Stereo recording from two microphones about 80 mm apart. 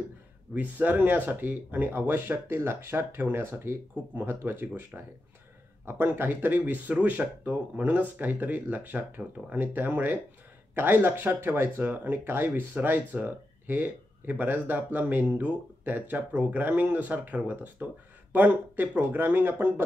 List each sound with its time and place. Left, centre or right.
0.6 s speech: right